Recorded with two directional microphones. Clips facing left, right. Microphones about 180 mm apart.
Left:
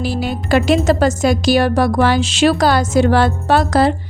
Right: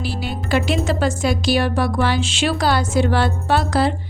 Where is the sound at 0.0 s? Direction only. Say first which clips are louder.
Left 6 dB; 45° left (ahead or behind).